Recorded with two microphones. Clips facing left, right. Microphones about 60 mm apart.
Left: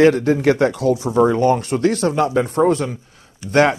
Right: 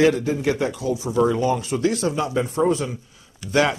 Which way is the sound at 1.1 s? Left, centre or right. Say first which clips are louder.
Left 4 dB; left.